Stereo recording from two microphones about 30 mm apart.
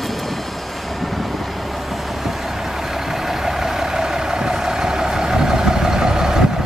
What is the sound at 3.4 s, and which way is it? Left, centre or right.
Vehicle, centre.